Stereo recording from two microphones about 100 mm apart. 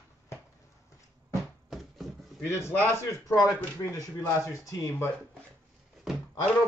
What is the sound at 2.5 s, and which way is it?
A man's voice, 25° left (ahead or behind).